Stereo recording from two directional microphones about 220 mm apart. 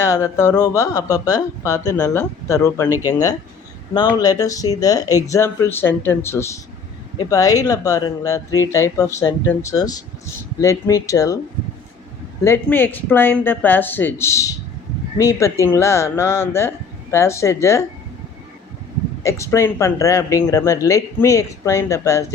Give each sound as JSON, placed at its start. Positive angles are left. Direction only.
{"t": 0.0, "sound": "speech", "side_deg": 10}
{"t": 12.5, "sound": "speech", "side_deg": 10}
{"t": 19.2, "sound": "speech", "side_deg": 15}